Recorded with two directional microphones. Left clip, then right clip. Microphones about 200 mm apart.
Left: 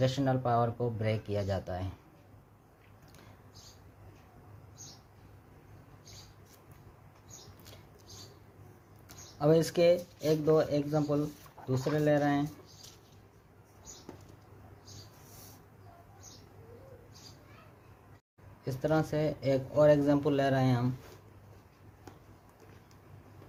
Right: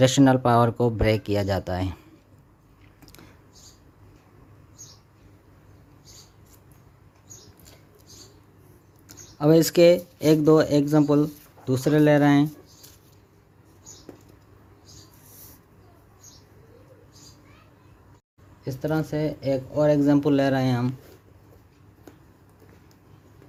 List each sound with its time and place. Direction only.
0.0 s speech: 50° right (ahead or behind)
9.4 s speech: 35° right (ahead or behind); by 12.5 s 50° right (ahead or behind)
18.6 s speech: 20° right (ahead or behind)